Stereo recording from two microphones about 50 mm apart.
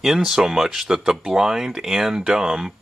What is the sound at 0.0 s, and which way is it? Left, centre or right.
Speech, centre.